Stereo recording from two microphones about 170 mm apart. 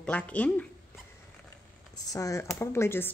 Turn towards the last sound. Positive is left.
turn(degrees=15)  # may be behind; listen again after turning